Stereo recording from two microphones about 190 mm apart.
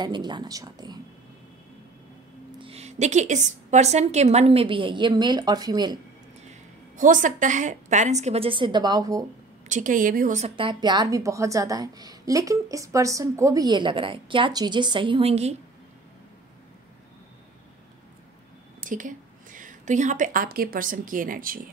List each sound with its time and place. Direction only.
0.0 s a woman's voice: 25° right (ahead or behind)
2.5 s a woman's voice: 30° right (ahead or behind)
7.0 s a woman's voice: 45° right (ahead or behind); by 9.2 s 20° right (ahead or behind)
9.7 s a woman's voice: 45° right (ahead or behind)
18.8 s a woman's voice: 45° right (ahead or behind)